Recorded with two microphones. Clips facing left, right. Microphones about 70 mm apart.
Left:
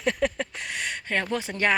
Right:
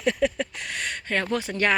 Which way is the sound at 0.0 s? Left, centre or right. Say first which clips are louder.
Right 2 dB; left.